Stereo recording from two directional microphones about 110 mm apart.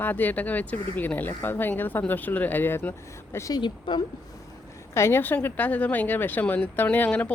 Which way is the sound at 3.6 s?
45° left (ahead or behind).